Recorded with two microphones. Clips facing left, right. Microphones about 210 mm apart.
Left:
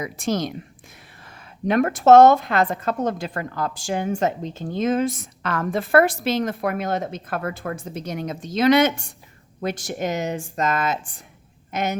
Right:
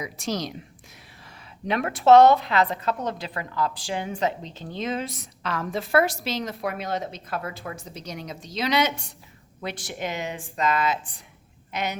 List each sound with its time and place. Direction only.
0.0 s a woman's voice: 50° left (ahead or behind)
1.6 s a woman's voice: 45° left (ahead or behind)